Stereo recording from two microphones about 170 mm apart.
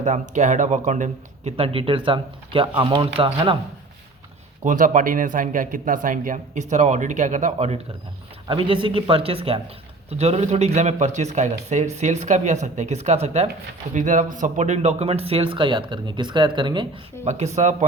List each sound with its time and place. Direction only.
0.0 s speech: 45° right (ahead or behind)
4.6 s speech: 50° right (ahead or behind)
8.4 s speech: 30° right (ahead or behind)
17.2 s speech: 40° right (ahead or behind)